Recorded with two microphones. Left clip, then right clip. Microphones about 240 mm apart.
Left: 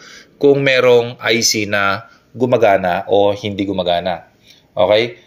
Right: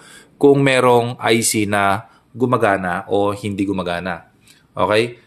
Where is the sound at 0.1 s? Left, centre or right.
Right.